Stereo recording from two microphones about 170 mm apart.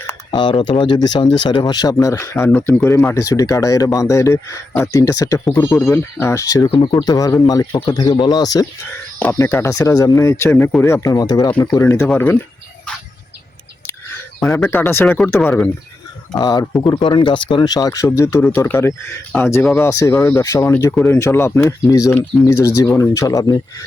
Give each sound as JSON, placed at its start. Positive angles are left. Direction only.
{"t": 0.3, "sound": "speech", "side_deg": 30}
{"t": 9.1, "sound": "speech", "side_deg": 10}
{"t": 11.5, "sound": "speech", "side_deg": 10}
{"t": 14.3, "sound": "speech", "side_deg": 10}
{"t": 15.0, "sound": "speech", "side_deg": 5}
{"t": 16.3, "sound": "speech", "side_deg": 25}